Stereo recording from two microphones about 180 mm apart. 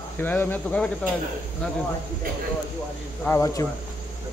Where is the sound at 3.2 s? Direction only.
15° left (ahead or behind).